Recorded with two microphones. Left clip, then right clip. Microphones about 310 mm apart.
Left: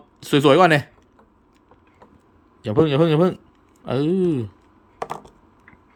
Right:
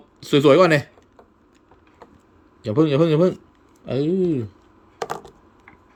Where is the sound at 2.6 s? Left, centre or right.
Centre.